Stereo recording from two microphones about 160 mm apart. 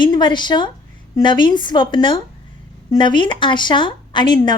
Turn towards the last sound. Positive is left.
turn(degrees=30)  # may be behind; listen again after turning